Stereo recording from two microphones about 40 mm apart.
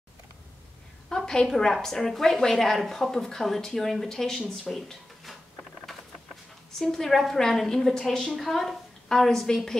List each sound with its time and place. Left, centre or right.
1.0 s a woman's voice: centre
6.8 s a woman's voice: centre
8.2 s a woman's voice: centre
9.3 s a woman's voice: centre